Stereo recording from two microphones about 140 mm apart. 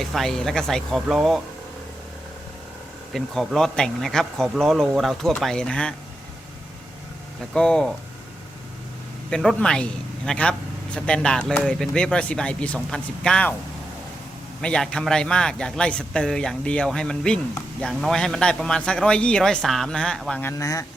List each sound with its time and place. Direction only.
0.0 s speech: centre (ahead or behind)
3.1 s speech: centre (ahead or behind)
7.5 s speech: 5° left (ahead or behind)
9.3 s speech: 5° left (ahead or behind)
14.6 s speech: 5° left (ahead or behind)
20.4 s speech: 20° left (ahead or behind)